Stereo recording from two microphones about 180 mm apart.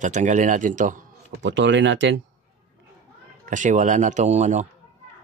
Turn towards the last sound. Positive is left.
turn(degrees=-40)  # may be behind; listen again after turning